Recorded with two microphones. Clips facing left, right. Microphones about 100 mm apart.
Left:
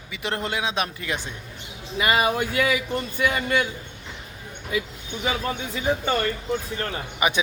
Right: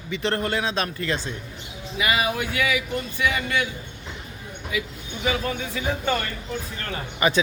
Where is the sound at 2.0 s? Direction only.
40° left (ahead or behind).